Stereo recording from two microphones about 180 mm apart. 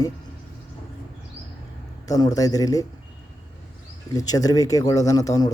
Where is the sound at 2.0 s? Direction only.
20° left (ahead or behind).